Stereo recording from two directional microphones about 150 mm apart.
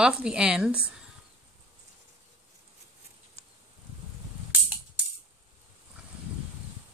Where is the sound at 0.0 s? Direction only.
5° right (ahead or behind).